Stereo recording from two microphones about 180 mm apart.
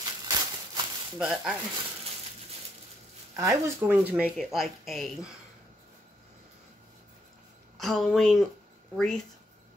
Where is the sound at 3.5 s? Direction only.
10° right (ahead or behind).